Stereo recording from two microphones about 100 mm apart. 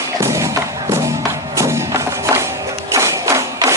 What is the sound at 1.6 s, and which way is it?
Music, 30° right (ahead or behind).